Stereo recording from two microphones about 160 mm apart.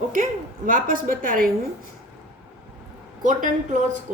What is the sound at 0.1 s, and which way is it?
A woman's voice, 55° right (ahead or behind).